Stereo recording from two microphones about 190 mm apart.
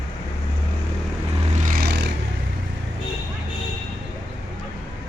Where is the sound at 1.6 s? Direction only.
45° right (ahead or behind).